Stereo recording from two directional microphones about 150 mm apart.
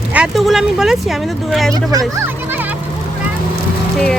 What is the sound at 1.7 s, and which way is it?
Speech, 25° right (ahead or behind).